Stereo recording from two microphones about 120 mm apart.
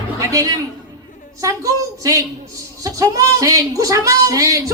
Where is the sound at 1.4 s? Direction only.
30° right (ahead or behind).